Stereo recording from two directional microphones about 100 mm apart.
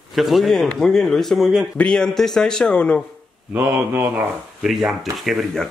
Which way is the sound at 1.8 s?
5° left (ahead or behind).